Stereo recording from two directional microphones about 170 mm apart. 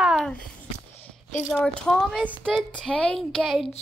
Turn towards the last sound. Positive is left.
turn(degrees=0)  # may be behind; listen again after turning